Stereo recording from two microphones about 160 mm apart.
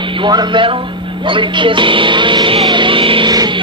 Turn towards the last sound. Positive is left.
turn(degrees=-25)  # may be behind; listen again after turning